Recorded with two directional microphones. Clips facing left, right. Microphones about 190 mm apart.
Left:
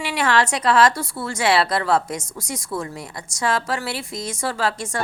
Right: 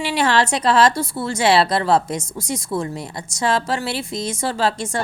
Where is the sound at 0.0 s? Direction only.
30° right (ahead or behind).